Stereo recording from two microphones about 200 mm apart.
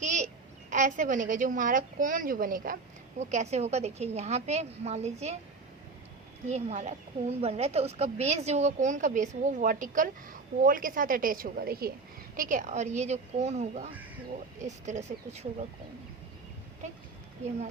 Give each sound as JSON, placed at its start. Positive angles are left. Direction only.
{"t": 0.0, "sound": "a sound", "side_deg": -40}
{"t": 0.7, "sound": "speech", "side_deg": -40}
{"t": 6.5, "sound": "speech", "side_deg": -35}